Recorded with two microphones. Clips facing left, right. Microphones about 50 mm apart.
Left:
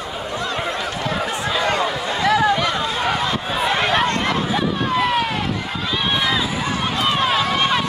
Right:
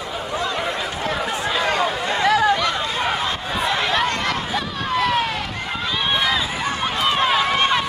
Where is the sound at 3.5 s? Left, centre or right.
Centre.